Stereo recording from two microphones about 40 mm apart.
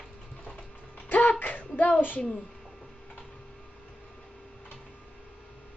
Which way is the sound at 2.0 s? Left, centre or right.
Left.